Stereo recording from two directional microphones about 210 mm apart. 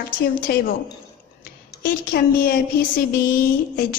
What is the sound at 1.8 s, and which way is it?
Speech, 45° left (ahead or behind).